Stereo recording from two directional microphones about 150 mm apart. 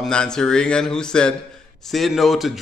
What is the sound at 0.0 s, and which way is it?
Speech, 5° left (ahead or behind).